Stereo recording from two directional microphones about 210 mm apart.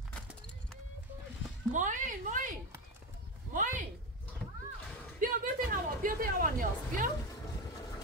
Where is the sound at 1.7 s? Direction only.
35° right (ahead or behind).